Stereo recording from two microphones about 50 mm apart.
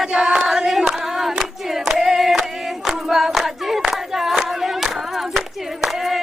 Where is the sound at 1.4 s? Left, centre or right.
Centre.